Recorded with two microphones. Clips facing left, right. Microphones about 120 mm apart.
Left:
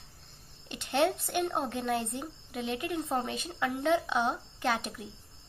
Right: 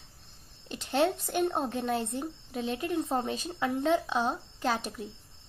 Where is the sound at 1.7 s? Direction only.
25° right (ahead or behind).